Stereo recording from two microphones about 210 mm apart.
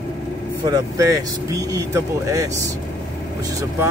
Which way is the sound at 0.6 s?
15° right (ahead or behind).